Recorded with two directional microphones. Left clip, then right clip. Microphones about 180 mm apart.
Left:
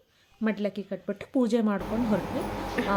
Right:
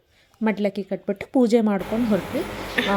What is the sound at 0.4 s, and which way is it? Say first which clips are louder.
A woman's voice: right 6 dB; 30° right (ahead or behind).